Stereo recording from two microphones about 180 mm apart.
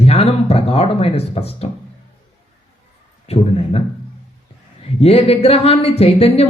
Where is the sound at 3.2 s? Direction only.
35° left (ahead or behind).